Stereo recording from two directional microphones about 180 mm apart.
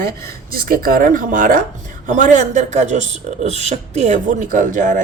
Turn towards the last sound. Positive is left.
turn(degrees=-45)  # may be behind; listen again after turning